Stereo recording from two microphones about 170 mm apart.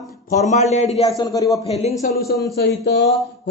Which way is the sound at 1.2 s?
20° left (ahead or behind).